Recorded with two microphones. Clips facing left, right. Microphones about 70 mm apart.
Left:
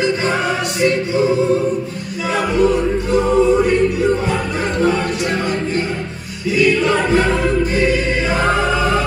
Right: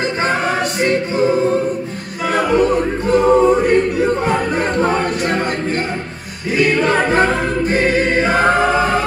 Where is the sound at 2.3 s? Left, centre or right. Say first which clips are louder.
Right 1 dB; right.